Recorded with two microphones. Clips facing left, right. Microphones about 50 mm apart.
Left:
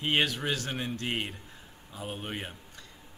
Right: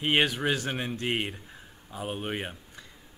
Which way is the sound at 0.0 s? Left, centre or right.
Centre.